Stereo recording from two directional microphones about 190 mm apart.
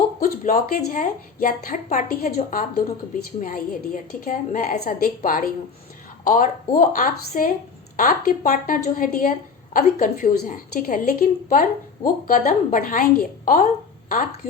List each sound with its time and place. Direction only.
0.2 s a woman's voice: 50° left (ahead or behind)